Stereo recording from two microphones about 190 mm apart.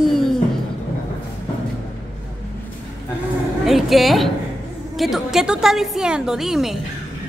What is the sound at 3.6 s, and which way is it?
A woman's voice, centre (ahead or behind).